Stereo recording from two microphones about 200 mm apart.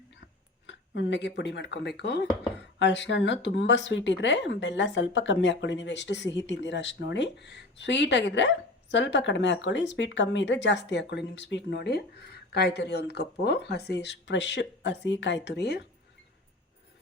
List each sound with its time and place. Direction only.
0.7 s speech: 65° left (ahead or behind)